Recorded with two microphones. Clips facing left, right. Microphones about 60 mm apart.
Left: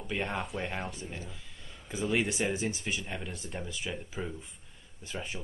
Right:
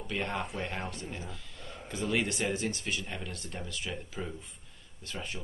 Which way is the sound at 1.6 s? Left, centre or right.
Right.